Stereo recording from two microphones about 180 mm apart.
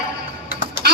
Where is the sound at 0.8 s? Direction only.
60° right (ahead or behind).